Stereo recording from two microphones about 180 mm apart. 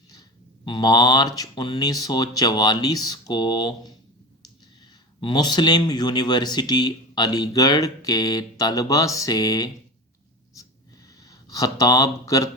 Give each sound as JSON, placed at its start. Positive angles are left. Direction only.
{"t": 0.1, "sound": "speech", "side_deg": 25}
{"t": 5.2, "sound": "speech", "side_deg": 25}
{"t": 11.2, "sound": "speech", "side_deg": 20}